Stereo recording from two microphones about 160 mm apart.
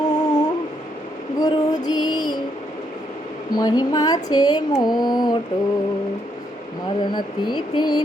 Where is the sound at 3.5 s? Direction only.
25° left (ahead or behind).